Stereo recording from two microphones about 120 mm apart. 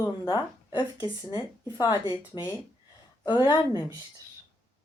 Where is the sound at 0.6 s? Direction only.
40° left (ahead or behind).